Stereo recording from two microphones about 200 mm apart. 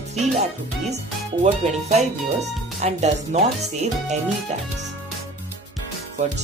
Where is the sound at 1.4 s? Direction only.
35° right (ahead or behind).